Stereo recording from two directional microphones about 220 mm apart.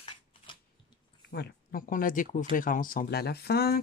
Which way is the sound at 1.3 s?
40° left (ahead or behind).